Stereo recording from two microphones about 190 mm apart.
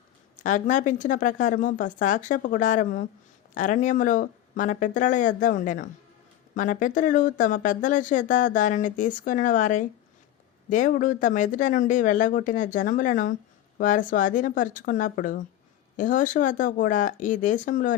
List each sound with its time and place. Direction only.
0.4 s speech: 40° left (ahead or behind)